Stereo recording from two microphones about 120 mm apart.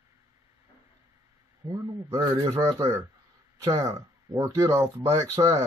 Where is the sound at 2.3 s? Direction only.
30° right (ahead or behind).